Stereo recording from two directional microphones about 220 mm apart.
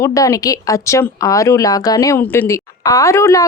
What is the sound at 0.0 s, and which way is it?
Speech, 15° left (ahead or behind).